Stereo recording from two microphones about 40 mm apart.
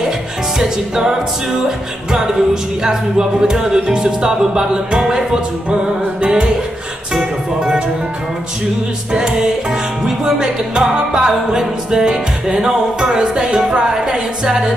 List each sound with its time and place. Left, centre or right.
0.6 s music: centre
9.1 s music: centre